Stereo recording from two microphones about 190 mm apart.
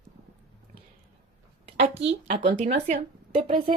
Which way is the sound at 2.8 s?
35° right (ahead or behind).